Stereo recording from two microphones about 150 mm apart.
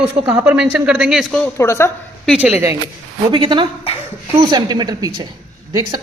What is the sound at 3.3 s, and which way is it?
A woman's voice, 35° right (ahead or behind).